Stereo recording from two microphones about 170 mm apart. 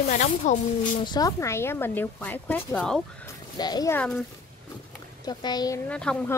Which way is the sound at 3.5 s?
25° left (ahead or behind).